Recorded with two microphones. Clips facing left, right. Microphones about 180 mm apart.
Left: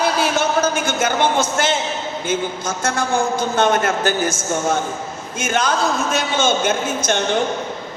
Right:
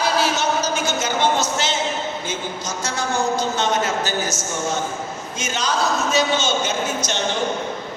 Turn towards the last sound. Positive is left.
turn(degrees=55)  # may be behind; listen again after turning